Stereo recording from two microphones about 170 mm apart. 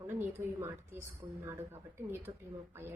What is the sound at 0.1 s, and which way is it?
A woman's voice, 15° right (ahead or behind).